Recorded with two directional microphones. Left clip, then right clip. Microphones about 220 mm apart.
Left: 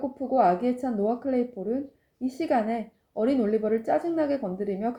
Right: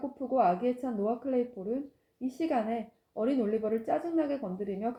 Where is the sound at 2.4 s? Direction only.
40° left (ahead or behind).